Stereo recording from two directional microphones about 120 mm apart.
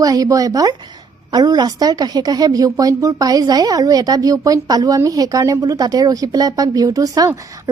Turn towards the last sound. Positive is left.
turn(degrees=-30)  # may be behind; listen again after turning